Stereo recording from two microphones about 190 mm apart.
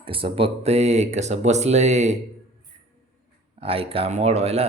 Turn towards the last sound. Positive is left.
turn(degrees=-35)  # may be behind; listen again after turning